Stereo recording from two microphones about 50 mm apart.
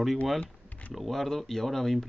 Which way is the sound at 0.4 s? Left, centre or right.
Left.